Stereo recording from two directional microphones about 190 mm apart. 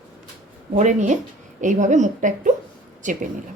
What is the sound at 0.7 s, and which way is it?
A woman's voice, 40° right (ahead or behind).